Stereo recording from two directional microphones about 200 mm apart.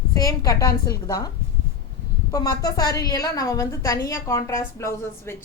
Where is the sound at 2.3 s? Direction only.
20° left (ahead or behind).